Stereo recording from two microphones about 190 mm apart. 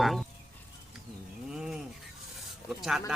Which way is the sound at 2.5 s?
Centre (ahead or behind).